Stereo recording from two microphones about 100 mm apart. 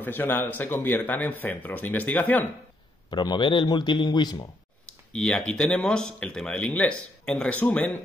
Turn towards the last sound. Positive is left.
turn(degrees=15)  # may be behind; listen again after turning